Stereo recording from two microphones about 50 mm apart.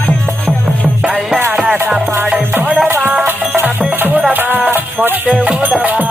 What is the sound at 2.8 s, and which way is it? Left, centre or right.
Music, right.